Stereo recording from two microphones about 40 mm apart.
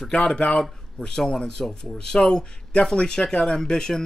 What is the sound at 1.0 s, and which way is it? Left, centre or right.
Speech, centre.